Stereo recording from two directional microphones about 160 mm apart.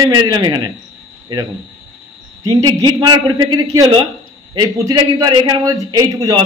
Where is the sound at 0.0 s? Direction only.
20° right (ahead or behind).